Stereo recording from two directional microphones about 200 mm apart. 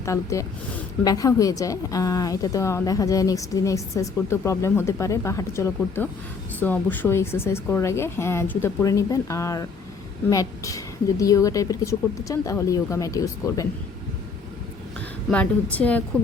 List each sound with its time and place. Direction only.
0.0 s a woman's voice: 15° left (ahead or behind)
15.3 s a woman's voice: 5° left (ahead or behind)